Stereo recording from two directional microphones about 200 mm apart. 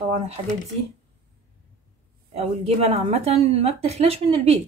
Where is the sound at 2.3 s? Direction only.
30° right (ahead or behind).